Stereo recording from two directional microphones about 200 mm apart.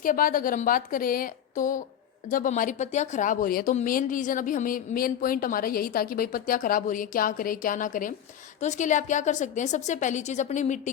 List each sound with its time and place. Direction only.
0.0 s a woman's voice: 45° left (ahead or behind)